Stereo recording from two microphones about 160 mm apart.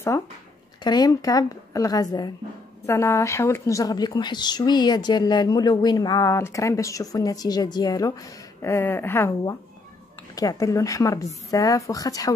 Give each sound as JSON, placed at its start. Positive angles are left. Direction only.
{"t": 0.8, "sound": "speech", "side_deg": 25}
{"t": 10.3, "sound": "speech", "side_deg": 20}